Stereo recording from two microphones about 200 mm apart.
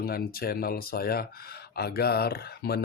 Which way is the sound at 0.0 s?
50° left (ahead or behind).